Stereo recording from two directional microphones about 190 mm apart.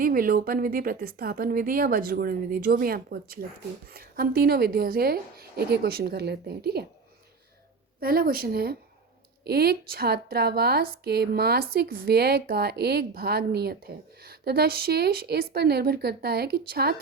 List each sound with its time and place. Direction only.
0.0 s a woman's voice: 50° right (ahead or behind)
8.0 s a woman's voice: 50° right (ahead or behind)